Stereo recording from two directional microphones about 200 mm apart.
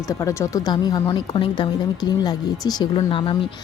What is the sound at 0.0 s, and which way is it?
A woman's voice, 15° left (ahead or behind).